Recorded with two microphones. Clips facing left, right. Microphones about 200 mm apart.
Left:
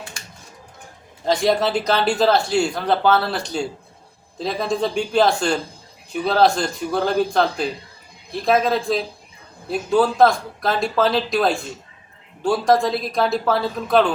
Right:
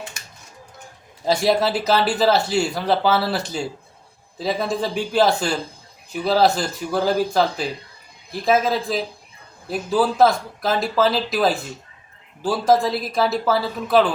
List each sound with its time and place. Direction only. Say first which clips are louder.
1.2 s speech: even; 5° right (ahead or behind)